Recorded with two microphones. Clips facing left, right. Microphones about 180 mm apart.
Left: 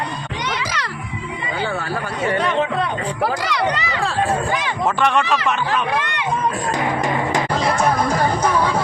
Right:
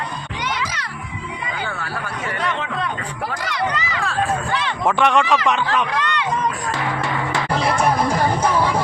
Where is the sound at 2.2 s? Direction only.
30° left (ahead or behind).